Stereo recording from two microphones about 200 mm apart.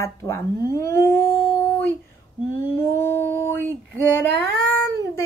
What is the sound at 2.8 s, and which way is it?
Speech, 10° left (ahead or behind).